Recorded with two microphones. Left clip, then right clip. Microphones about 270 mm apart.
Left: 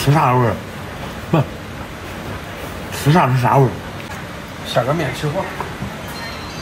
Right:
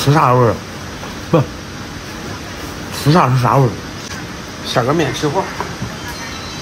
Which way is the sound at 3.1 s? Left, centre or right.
Centre.